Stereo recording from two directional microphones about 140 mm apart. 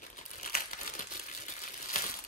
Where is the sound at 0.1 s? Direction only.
65° left (ahead or behind).